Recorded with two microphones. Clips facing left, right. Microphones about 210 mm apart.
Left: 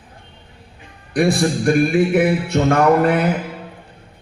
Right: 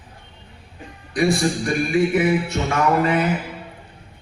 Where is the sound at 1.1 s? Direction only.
60° left (ahead or behind).